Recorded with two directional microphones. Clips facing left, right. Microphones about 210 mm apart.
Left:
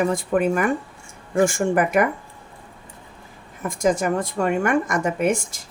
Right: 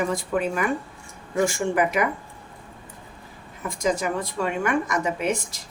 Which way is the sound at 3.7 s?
50° left (ahead or behind).